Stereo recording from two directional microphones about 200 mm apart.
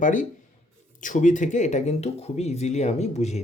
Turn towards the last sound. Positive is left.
turn(degrees=35)  # may be behind; listen again after turning